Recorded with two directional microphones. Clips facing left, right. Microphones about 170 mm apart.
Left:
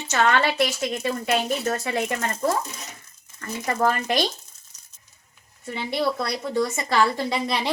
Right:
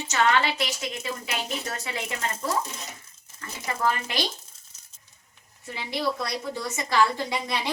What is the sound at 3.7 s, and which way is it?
Speech, 45° left (ahead or behind).